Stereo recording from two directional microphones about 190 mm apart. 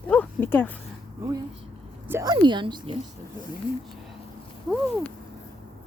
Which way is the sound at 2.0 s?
15° right (ahead or behind).